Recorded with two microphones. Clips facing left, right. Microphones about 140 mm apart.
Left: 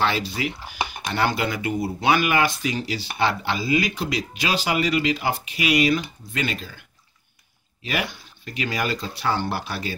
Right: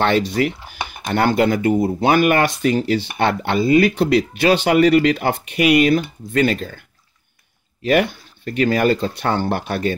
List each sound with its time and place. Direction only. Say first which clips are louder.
0.0 s speech: right 7 dB; 60° right (ahead or behind)
1.1 s speech: right 8 dB; 50° right (ahead or behind)
7.8 s speech: right 11 dB; 50° right (ahead or behind)